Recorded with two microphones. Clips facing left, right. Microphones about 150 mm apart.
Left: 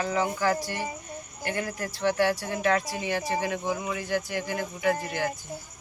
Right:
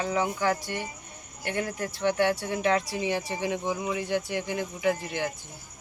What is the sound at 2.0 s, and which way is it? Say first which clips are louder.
Speech: even; 15° right (ahead or behind).